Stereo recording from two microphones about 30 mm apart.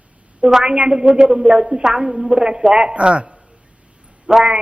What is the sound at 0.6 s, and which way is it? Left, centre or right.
A woman's voice, right.